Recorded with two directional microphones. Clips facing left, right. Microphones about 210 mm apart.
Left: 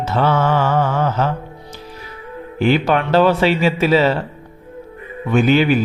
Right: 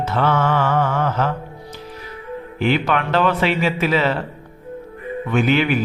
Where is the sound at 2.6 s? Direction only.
35° left (ahead or behind).